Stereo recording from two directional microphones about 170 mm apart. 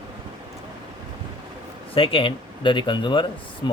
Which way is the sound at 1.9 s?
30° left (ahead or behind).